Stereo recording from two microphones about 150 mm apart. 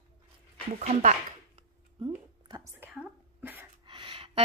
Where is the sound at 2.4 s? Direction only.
25° right (ahead or behind).